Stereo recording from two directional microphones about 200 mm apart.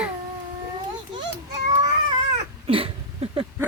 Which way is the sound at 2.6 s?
30° right (ahead or behind).